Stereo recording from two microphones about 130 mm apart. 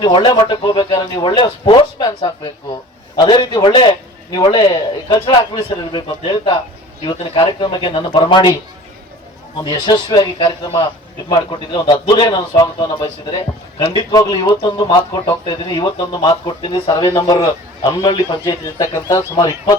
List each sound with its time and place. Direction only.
0.0 s a man's voice: 40° left (ahead or behind)
9.6 s a man's voice: 35° left (ahead or behind)